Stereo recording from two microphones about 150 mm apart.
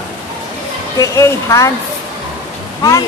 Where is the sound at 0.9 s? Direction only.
20° left (ahead or behind).